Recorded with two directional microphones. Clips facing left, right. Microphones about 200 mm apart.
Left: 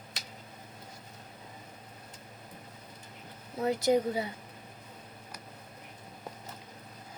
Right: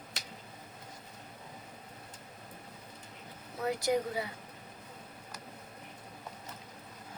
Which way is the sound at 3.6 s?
25° left (ahead or behind).